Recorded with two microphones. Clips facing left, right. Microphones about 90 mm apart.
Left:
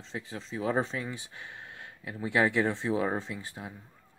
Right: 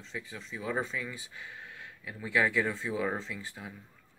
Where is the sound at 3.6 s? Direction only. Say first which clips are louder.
Left 2 dB; 40° left (ahead or behind).